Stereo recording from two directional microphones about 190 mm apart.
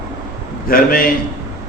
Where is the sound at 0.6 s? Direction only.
50° left (ahead or behind).